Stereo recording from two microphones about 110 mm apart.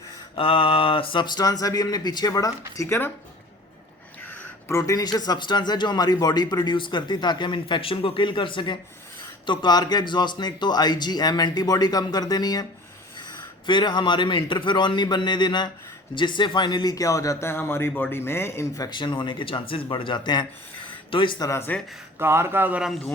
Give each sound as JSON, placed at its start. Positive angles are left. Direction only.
{"t": 0.3, "sound": "speech", "side_deg": 55}
{"t": 4.7, "sound": "speech", "side_deg": 30}
{"t": 13.7, "sound": "a man's voice", "side_deg": 45}
{"t": 18.9, "sound": "speech", "side_deg": 45}
{"t": 21.7, "sound": "speech", "side_deg": 15}
{"t": 22.2, "sound": "a man's voice", "side_deg": -20}